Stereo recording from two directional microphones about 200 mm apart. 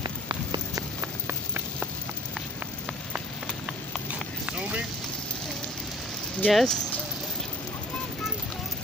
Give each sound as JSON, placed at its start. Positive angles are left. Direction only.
{"t": 0.0, "sound": "rain on surface", "side_deg": -20}
{"t": 4.6, "sound": "vehicle", "side_deg": -5}
{"t": 6.4, "sound": "speech", "side_deg": 5}